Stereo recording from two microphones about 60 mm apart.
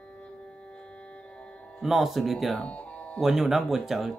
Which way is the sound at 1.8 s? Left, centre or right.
Centre.